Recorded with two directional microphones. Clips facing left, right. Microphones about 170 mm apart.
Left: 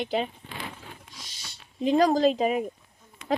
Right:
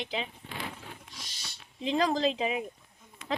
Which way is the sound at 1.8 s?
45° left (ahead or behind).